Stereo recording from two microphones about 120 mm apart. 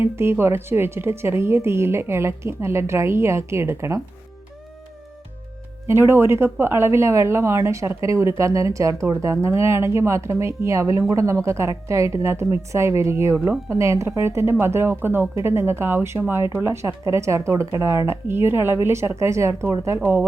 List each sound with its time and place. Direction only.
0.0 s speech: 20° right (ahead or behind)
5.9 s speech: 20° right (ahead or behind)